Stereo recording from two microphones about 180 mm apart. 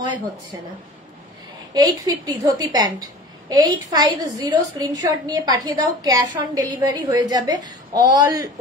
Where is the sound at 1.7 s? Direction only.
20° right (ahead or behind).